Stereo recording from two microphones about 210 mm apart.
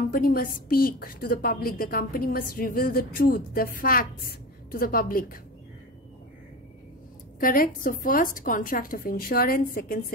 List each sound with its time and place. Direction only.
0.1 s a woman's voice: 45° left (ahead or behind)
7.3 s a woman's voice: 40° left (ahead or behind)